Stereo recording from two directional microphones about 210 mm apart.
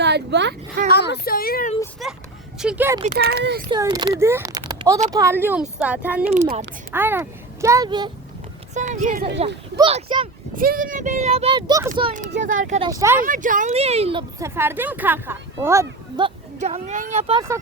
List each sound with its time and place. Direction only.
0.0 s speech: 55° right (ahead or behind)
0.9 s speech: 50° left (ahead or behind)
2.0 s a child's voice: centre (ahead or behind)
3.0 s speech: 45° right (ahead or behind)
3.7 s a child's voice: 20° right (ahead or behind)
8.7 s speech: 35° right (ahead or behind)
9.7 s speech: 25° right (ahead or behind)
10.6 s speech: 40° right (ahead or behind); by 11.9 s 20° right (ahead or behind)
12.4 s speech: 35° right (ahead or behind)
12.8 s a child's voice: 15° right (ahead or behind)
13.1 s speech: 40° right (ahead or behind); by 16.3 s 15° right (ahead or behind)
16.6 s speech: 30° right (ahead or behind)